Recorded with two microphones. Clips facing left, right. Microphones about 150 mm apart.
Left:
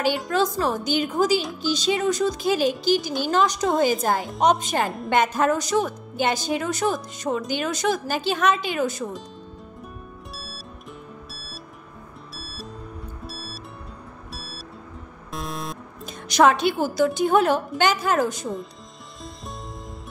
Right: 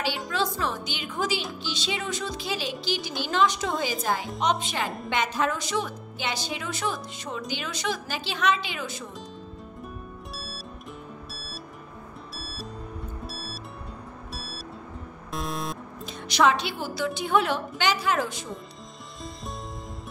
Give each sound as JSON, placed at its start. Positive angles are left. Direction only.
{"t": 0.3, "sound": "a woman's voice", "side_deg": 45}
{"t": 10.3, "sound": "music", "side_deg": 0}
{"t": 16.1, "sound": "a woman's voice", "side_deg": 45}